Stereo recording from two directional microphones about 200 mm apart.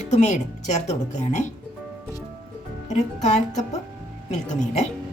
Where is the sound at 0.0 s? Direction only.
35° left (ahead or behind).